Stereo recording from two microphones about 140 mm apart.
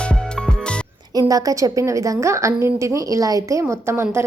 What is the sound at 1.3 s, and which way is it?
A woman's voice, 25° right (ahead or behind).